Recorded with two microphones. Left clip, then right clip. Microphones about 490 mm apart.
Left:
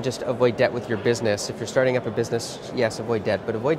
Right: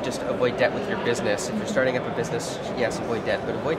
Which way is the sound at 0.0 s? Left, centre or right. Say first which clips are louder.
Left 2 dB; left.